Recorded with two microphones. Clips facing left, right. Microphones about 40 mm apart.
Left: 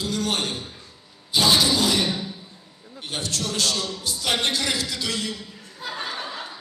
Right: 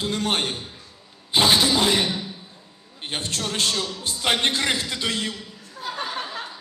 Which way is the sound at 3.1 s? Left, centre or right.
Right.